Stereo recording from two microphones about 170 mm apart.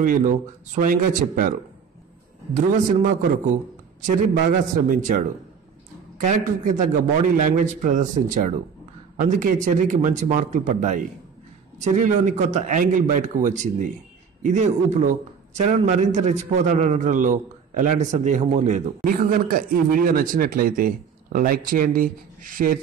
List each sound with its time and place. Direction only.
0.0 s a man's voice: 50° right (ahead or behind)
2.5 s a man's voice: 50° right (ahead or behind)
4.8 s a man's voice: 50° right (ahead or behind)
19.0 s speech: 55° right (ahead or behind)